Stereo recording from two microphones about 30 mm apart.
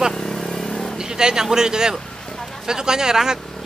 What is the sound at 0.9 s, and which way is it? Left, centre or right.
A man's voice, right.